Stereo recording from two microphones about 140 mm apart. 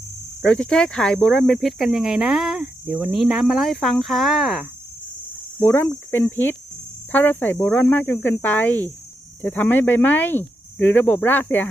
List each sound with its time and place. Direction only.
0.4 s speech: 5° left (ahead or behind)
5.5 s speech: 15° left (ahead or behind)